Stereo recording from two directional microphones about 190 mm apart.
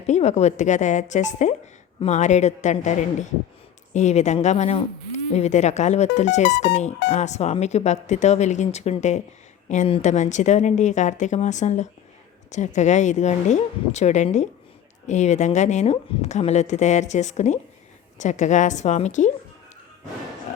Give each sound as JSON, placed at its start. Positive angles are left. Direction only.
{"t": 0.1, "sound": "speech", "side_deg": 35}